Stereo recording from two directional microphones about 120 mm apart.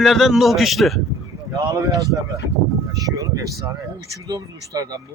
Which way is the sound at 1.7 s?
30° right (ahead or behind).